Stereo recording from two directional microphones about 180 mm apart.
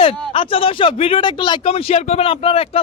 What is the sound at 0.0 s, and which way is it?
Speech, 30° left (ahead or behind).